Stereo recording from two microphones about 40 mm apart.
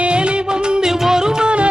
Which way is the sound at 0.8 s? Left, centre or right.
Centre.